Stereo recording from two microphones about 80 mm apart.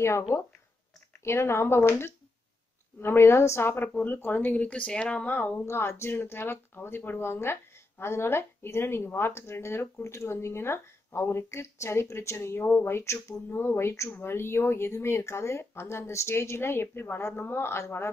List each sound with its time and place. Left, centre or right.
0.0 s speech: left
3.8 s speech: left
5.7 s speech: left